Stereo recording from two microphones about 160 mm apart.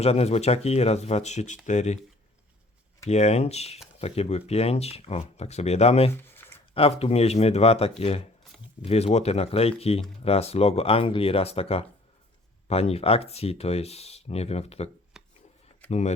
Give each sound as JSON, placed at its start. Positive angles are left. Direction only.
{"t": 0.0, "sound": "speech", "side_deg": 40}
{"t": 3.1, "sound": "speech", "side_deg": 45}
{"t": 6.1, "sound": "a sound", "side_deg": 15}
{"t": 6.7, "sound": "speech", "side_deg": 40}
{"t": 15.1, "sound": "chopping", "side_deg": -5}
{"t": 15.9, "sound": "speech", "side_deg": 45}